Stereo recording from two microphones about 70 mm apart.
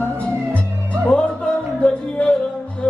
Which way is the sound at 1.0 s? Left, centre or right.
Centre.